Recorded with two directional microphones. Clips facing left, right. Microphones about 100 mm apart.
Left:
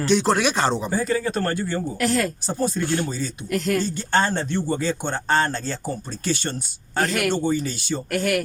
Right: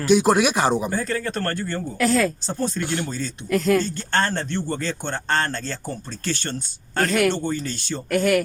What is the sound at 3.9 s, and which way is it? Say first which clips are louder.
Speech: left 2 dB; 10° left (ahead or behind).